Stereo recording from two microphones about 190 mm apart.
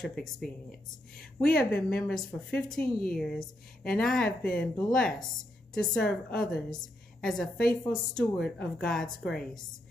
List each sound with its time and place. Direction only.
0.0 s a woman's voice: centre (ahead or behind)